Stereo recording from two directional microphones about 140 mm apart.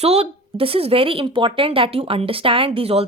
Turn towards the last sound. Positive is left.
turn(degrees=-45)  # may be behind; listen again after turning